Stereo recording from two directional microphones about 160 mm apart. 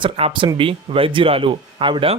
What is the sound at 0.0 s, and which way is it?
Speech, 35° right (ahead or behind).